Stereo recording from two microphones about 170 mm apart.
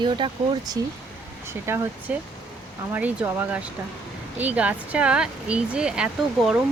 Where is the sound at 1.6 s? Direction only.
15° right (ahead or behind).